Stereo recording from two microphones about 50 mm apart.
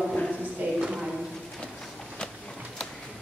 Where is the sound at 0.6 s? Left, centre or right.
Right.